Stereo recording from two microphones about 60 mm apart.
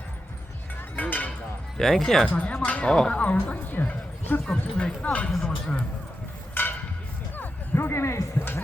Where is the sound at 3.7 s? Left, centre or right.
Left.